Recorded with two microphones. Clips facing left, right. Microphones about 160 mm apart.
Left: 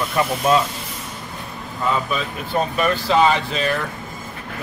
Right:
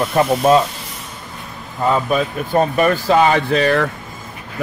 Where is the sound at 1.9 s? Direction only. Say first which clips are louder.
Right 6 dB; 50° right (ahead or behind); by 3.8 s 75° right (ahead or behind).